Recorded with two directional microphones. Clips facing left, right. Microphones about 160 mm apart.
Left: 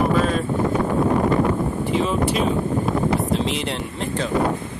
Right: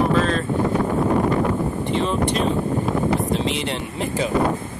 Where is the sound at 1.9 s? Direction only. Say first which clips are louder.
Left 1 dB; 5° left (ahead or behind).